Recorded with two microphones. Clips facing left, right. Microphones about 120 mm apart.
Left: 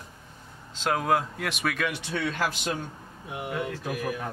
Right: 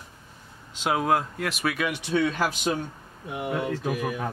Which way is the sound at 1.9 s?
15° right (ahead or behind).